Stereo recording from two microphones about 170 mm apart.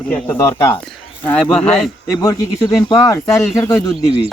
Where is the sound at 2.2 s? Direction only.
20° left (ahead or behind).